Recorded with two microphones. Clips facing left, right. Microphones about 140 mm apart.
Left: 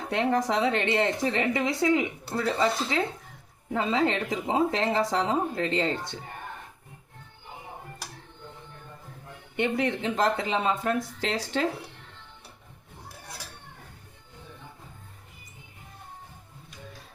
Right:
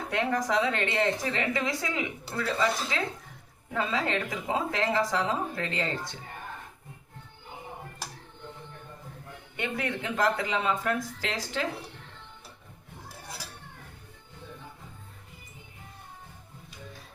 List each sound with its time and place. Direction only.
0.1 s a woman's voice: 25° left (ahead or behind)
9.6 s a woman's voice: 25° left (ahead or behind)